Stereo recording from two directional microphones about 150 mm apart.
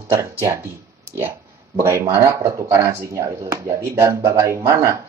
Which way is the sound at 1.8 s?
20° right (ahead or behind).